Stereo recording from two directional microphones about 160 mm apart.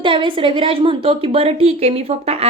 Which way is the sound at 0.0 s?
30° right (ahead or behind).